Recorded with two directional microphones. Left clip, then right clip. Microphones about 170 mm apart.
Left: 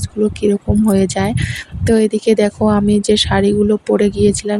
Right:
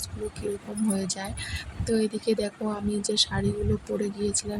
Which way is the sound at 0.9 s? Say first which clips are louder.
Left 15 dB; 50° left (ahead or behind).